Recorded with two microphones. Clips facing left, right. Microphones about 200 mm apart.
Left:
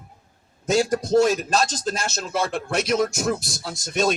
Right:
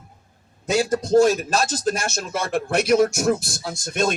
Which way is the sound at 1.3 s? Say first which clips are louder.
Even; 5° right (ahead or behind).